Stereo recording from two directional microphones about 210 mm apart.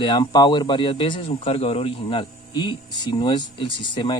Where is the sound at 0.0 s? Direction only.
20° left (ahead or behind).